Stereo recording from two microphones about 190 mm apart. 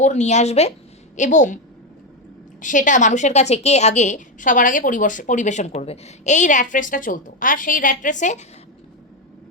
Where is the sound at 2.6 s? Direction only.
40° left (ahead or behind).